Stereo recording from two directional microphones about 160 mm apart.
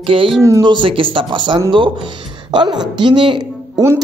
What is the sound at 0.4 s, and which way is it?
A woman's voice, 20° right (ahead or behind).